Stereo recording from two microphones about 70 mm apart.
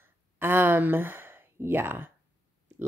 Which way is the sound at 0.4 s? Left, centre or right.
Right.